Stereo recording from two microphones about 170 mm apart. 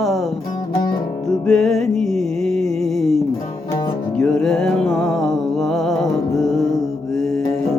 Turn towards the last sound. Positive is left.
turn(degrees=0)  # may be behind; listen again after turning